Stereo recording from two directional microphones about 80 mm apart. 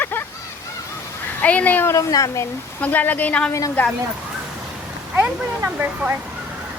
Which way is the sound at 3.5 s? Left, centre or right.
Left.